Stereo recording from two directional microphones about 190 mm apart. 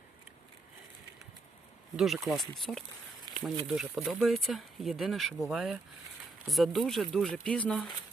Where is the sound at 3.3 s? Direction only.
20° right (ahead or behind).